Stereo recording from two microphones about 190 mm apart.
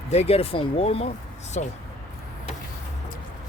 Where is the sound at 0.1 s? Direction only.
35° left (ahead or behind).